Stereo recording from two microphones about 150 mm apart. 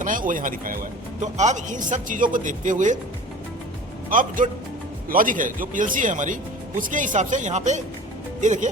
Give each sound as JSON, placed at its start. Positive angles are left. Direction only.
{"t": 0.0, "sound": "speech", "side_deg": -65}
{"t": 1.4, "sound": "speech", "side_deg": -55}
{"t": 4.1, "sound": "speech", "side_deg": -65}